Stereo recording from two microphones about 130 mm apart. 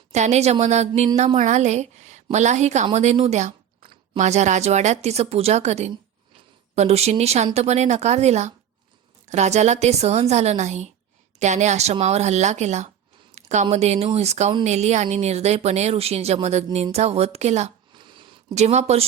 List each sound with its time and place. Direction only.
0.1 s a woman's voice: 60° right (ahead or behind)
17.9 s a sound: 35° right (ahead or behind)
18.5 s speech: 60° right (ahead or behind)